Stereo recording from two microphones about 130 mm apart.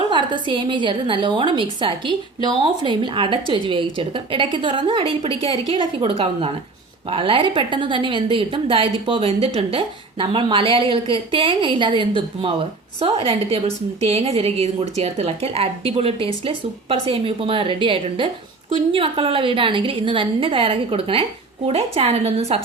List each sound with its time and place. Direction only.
0.1 s a woman's voice: 35° right (ahead or behind)